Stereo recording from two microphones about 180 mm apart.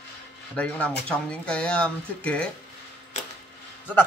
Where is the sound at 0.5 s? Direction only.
10° left (ahead or behind).